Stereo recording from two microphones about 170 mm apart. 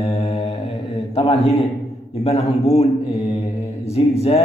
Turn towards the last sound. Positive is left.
turn(degrees=35)  # may be behind; listen again after turning